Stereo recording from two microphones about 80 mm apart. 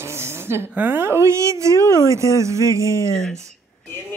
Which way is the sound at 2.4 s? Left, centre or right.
Right.